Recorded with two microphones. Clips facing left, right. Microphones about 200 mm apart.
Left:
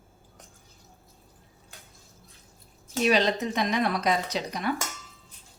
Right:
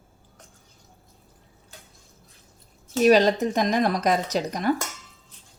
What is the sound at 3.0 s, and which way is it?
Speech, 45° right (ahead or behind).